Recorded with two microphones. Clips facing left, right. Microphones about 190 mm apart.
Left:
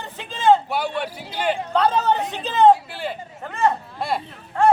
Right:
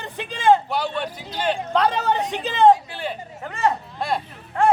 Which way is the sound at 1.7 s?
15° right (ahead or behind).